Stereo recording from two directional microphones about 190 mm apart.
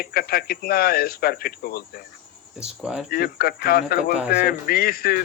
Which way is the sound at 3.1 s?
50° left (ahead or behind).